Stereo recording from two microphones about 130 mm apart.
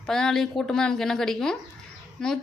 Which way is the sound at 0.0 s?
5° left (ahead or behind).